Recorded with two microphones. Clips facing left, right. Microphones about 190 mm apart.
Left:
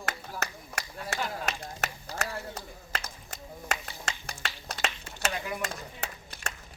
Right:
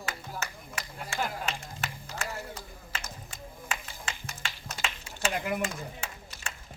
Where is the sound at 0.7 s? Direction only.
40° left (ahead or behind).